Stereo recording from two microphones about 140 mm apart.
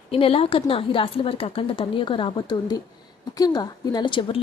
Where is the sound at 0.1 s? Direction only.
40° left (ahead or behind).